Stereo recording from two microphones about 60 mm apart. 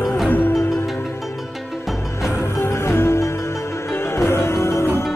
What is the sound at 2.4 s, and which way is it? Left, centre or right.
Music, left.